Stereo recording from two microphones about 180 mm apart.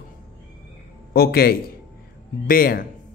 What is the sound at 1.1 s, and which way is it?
A man's voice, 60° left (ahead or behind).